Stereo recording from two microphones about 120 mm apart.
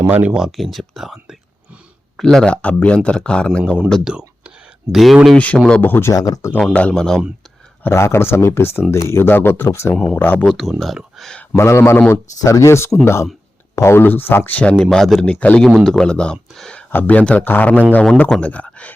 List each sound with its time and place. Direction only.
0.0 s speech: 15° right (ahead or behind); by 3.6 s 10° left (ahead or behind)
4.0 s speech: 5° right (ahead or behind); by 6.1 s 20° left (ahead or behind)
6.1 s speech: 30° left (ahead or behind)
6.7 s speech: 10° left (ahead or behind)
7.9 s speech: 20° left (ahead or behind)
10.4 s speech: centre (ahead or behind)
11.5 s speech: 20° left (ahead or behind)